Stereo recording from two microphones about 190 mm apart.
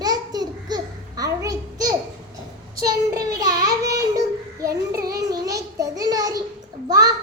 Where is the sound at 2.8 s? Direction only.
20° right (ahead or behind).